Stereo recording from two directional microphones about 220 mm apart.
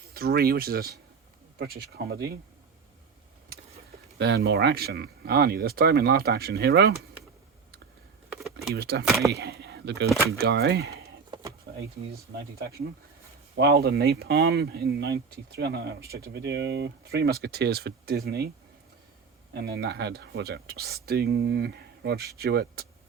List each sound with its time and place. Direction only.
0.1 s speech: 45° right (ahead or behind)
4.2 s speech: 50° right (ahead or behind)
8.7 s speech: 45° right (ahead or behind)
11.3 s a sound: 20° right (ahead or behind)
13.6 s speech: 45° right (ahead or behind)
19.5 s speech: 50° right (ahead or behind)